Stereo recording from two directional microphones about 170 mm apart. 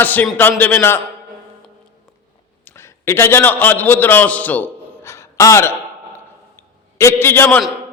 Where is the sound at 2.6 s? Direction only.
15° left (ahead or behind).